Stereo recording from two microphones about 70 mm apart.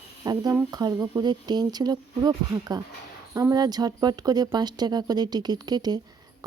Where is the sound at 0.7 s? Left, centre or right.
Right.